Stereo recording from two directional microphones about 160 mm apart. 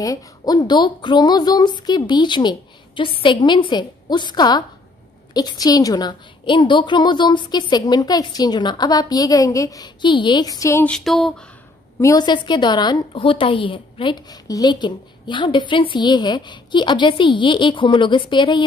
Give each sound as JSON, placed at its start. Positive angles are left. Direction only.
{"t": 0.0, "sound": "a woman's voice", "side_deg": 20}
{"t": 10.9, "sound": "a sound", "side_deg": 0}
{"t": 12.0, "sound": "a woman's voice", "side_deg": 25}